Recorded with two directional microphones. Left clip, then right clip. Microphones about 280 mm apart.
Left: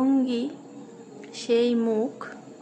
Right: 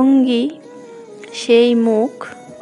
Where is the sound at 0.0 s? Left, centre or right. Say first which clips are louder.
Right 10 dB; right.